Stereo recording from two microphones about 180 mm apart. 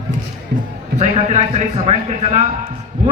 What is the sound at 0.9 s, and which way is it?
A man's voice, 40° right (ahead or behind).